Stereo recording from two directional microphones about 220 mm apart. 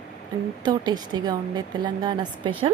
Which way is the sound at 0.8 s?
20° right (ahead or behind).